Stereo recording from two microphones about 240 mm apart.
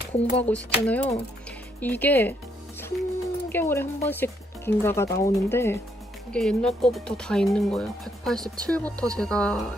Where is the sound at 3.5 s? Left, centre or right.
Centre.